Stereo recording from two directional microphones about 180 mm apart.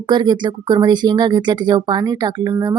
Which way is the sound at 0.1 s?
25° right (ahead or behind).